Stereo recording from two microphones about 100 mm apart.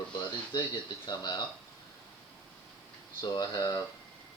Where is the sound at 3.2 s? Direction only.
40° left (ahead or behind).